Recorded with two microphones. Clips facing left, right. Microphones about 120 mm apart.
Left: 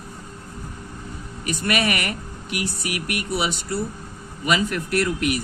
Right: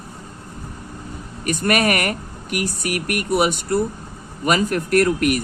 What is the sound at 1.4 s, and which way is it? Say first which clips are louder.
Speech: right 4 dB; 50° right (ahead or behind).